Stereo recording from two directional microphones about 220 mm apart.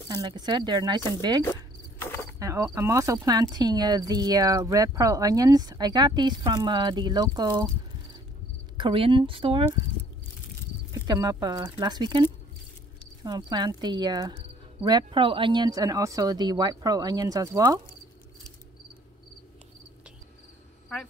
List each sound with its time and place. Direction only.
0.1 s speech: 20° right (ahead or behind)
1.4 s cricket: 10° left (ahead or behind)
2.3 s speech: 15° right (ahead or behind)
8.7 s speech: 25° right (ahead or behind)
10.9 s speech: 15° right (ahead or behind)